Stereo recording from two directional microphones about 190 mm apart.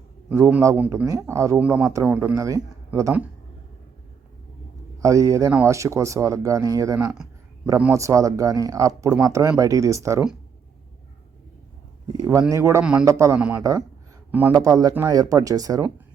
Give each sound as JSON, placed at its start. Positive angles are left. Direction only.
{"t": 0.3, "sound": "speech", "side_deg": -10}
{"t": 4.9, "sound": "speech", "side_deg": -15}
{"t": 12.1, "sound": "speech", "side_deg": -20}
{"t": 13.1, "sound": "speech", "side_deg": -15}